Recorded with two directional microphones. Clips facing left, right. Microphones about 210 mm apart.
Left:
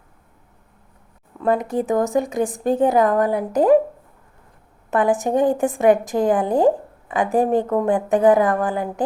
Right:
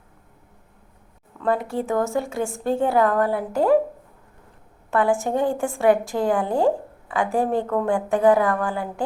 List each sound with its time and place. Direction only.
1.4 s a woman's voice: 20° left (ahead or behind)
4.9 s a woman's voice: 20° left (ahead or behind)